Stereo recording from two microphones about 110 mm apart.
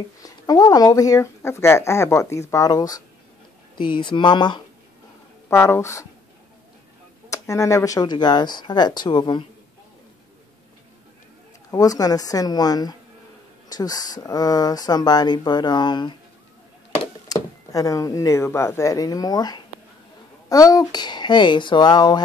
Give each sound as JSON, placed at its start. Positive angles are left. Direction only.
{"t": 0.2, "sound": "speech", "side_deg": 35}
{"t": 3.7, "sound": "speech", "side_deg": 45}
{"t": 5.5, "sound": "speech", "side_deg": 25}
{"t": 7.2, "sound": "speech", "side_deg": 30}
{"t": 11.7, "sound": "speech", "side_deg": 35}
{"t": 17.3, "sound": "speech", "side_deg": 30}